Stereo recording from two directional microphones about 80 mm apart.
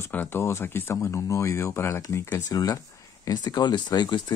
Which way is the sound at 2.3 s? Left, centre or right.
Left.